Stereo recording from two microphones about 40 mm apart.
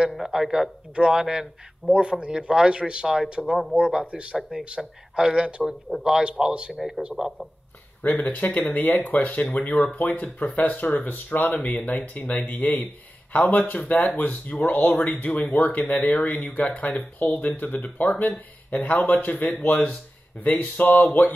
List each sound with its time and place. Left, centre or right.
0.2 s speech: centre
0.9 s speech: right
1.2 s speech: centre
2.0 s speech: right
4.4 s speech: centre
4.6 s speech: right
6.7 s a man's voice: centre
8.0 s speech: left
19.4 s speech: left